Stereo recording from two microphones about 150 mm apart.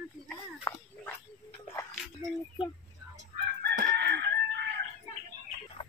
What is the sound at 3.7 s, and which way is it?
Chicken, 80° right.